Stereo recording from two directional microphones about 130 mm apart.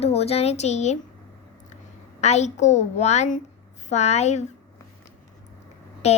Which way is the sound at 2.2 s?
60° left (ahead or behind).